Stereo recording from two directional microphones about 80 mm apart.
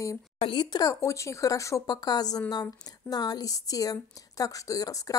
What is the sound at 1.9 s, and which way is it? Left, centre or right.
Speech, left.